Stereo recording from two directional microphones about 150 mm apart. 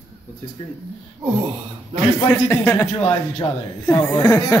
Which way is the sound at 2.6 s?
10° left (ahead or behind).